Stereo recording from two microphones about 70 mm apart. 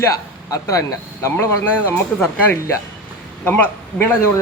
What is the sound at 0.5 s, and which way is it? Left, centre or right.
Speech, left.